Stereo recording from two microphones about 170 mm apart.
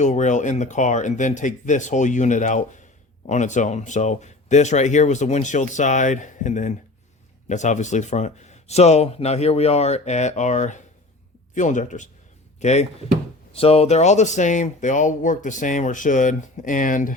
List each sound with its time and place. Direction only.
0.0 s speech: 45° left (ahead or behind)